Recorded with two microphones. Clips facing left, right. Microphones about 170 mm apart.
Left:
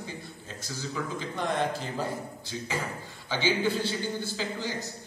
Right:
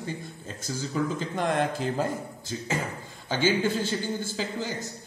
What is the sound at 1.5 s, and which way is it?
Speech, 50° right (ahead or behind).